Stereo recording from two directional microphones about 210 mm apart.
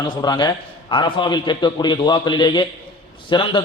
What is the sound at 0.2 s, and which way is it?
A man's voice, 20° left (ahead or behind).